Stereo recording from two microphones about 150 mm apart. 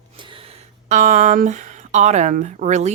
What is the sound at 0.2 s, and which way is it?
Speech, 35° right (ahead or behind).